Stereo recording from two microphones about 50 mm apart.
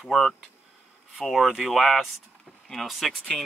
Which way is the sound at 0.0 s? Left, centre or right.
Centre.